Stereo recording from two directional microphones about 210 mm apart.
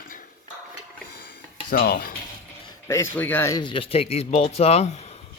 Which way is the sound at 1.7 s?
45° left (ahead or behind).